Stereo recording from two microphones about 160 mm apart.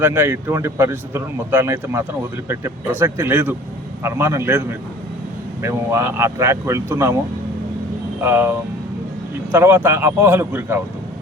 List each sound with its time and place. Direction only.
0.0 s speech: 15° right (ahead or behind)
8.2 s speech: 15° right (ahead or behind)